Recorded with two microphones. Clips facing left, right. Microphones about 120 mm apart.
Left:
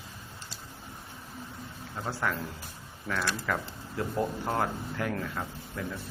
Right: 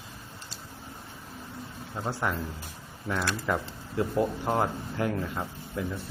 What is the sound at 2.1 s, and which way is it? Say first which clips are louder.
Speech: right 1 dB; 15° right (ahead or behind).